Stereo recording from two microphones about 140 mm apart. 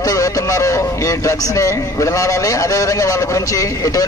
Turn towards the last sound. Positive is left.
turn(degrees=25)  # may be behind; listen again after turning